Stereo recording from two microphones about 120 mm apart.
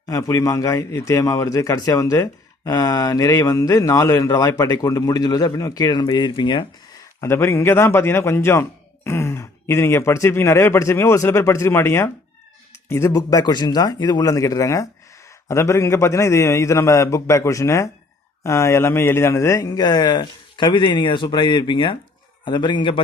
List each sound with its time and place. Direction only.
0.0 s a man's voice: 30° left (ahead or behind)
7.2 s a man's voice: 25° left (ahead or behind); by 23.0 s 40° left (ahead or behind)